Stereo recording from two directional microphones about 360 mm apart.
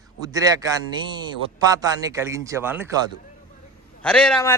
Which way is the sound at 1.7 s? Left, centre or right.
Centre.